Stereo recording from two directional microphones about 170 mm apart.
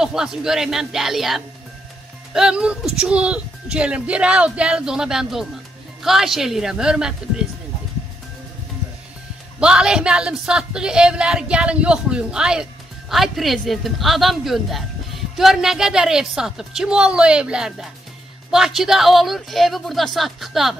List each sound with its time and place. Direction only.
0.0 s speech: 5° right (ahead or behind)
9.6 s speech: 5° right (ahead or behind)